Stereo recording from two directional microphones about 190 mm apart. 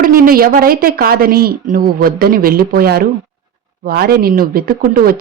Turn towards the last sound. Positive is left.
turn(degrees=-50)  # may be behind; listen again after turning